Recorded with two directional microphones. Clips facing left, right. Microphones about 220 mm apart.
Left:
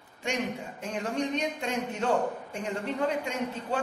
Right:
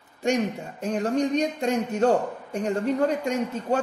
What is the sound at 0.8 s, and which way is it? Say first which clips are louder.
A woman's voice: right 8 dB; 40° right (ahead or behind).